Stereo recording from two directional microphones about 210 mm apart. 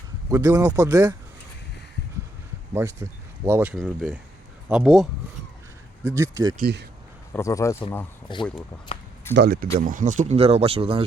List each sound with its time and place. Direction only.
0.3 s speech: 15° right (ahead or behind)
2.7 s speech: 10° right (ahead or behind)
6.1 s speech: 15° right (ahead or behind)
6.6 s speech: 50° right (ahead or behind)
7.3 s speech: 15° left (ahead or behind)
8.9 s a sound: 25° left (ahead or behind)
9.3 s speech: 50° right (ahead or behind)
9.8 s speech: 35° right (ahead or behind)